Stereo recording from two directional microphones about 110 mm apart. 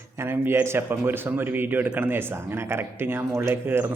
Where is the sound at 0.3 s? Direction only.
20° right (ahead or behind).